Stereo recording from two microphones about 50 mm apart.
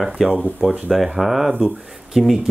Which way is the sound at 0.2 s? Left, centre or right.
Centre.